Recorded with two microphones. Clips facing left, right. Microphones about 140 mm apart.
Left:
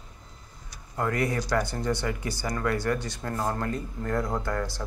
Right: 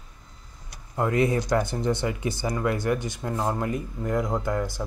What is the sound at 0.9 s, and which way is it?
Speech, 20° right (ahead or behind).